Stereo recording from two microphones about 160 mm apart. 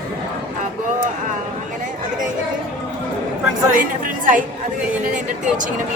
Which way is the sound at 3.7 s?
55° right (ahead or behind).